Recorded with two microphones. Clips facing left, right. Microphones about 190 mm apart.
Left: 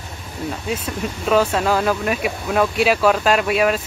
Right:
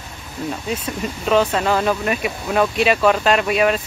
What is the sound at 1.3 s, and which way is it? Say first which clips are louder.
Speech: even; 5° left (ahead or behind).